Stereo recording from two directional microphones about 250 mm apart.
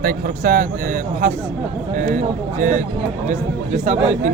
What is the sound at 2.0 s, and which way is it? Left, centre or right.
Speech, right.